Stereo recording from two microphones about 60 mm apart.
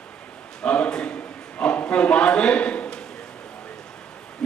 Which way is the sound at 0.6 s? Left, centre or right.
Centre.